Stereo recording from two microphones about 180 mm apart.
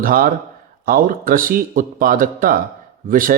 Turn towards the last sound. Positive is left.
turn(degrees=-50)  # may be behind; listen again after turning